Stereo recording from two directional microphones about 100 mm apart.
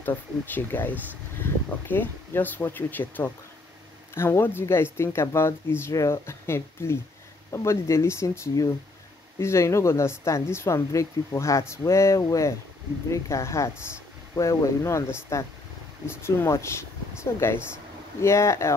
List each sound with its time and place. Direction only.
0.0 s speech: 20° left (ahead or behind)